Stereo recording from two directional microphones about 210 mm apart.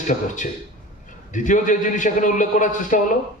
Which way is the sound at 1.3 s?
35° left (ahead or behind).